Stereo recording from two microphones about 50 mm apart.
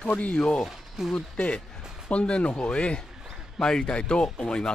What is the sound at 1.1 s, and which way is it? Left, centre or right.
Speech, left.